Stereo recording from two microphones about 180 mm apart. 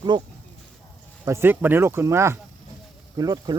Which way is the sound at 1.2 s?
15° right (ahead or behind).